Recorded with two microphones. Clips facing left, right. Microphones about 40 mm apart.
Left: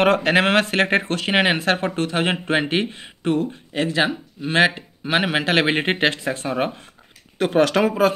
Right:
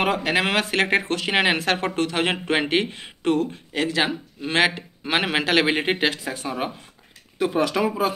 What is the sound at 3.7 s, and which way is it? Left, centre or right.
Speech, centre.